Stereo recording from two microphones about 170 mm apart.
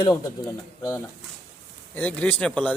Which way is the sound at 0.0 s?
20° left (ahead or behind).